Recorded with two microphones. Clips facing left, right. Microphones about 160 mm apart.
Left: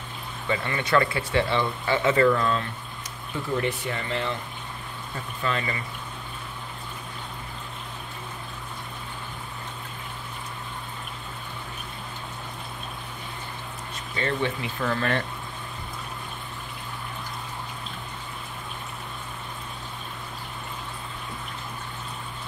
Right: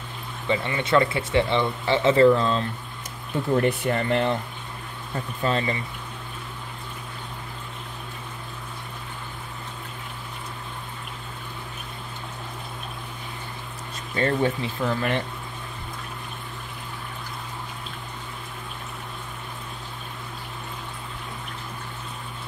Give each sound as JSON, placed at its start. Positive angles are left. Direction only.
{"t": 0.5, "sound": "speech", "side_deg": -25}
{"t": 3.5, "sound": "speech", "side_deg": -50}
{"t": 5.4, "sound": "speech", "side_deg": -35}
{"t": 14.1, "sound": "speech", "side_deg": -40}
{"t": 14.8, "sound": "speech", "side_deg": -15}